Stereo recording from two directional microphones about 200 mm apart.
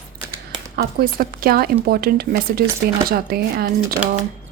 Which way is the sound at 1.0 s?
45° right (ahead or behind).